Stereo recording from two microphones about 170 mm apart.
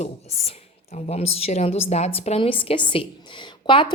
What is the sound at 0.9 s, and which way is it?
A woman's voice, 40° left (ahead or behind).